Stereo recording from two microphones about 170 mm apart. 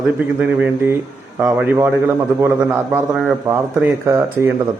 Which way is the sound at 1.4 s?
10° right (ahead or behind).